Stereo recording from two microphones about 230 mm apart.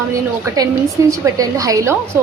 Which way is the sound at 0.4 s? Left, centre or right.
Centre.